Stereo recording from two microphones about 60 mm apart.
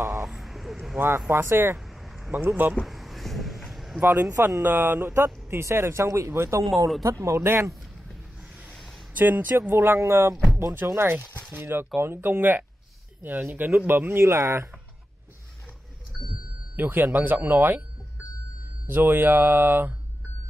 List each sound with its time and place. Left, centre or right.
0.2 s a sound: centre
0.9 s a man's voice: right
2.0 s a sound: centre
2.3 s speech: right
2.8 s vehicle: centre
4.0 s a man's voice: right
7.0 s a man's voice: right
8.6 s a sound: centre
9.1 s a man's voice: right
16.1 s vehicle: centre
16.7 s speech: right
18.9 s speech: right